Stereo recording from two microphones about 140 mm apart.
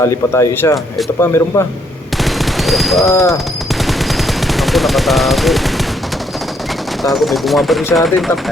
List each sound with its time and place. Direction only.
0.0 s speech: 20° left (ahead or behind)
2.2 s a sound: centre (ahead or behind)
3.0 s speech: 25° left (ahead or behind)
3.8 s machine gun: centre (ahead or behind)
7.0 s speech: centre (ahead or behind)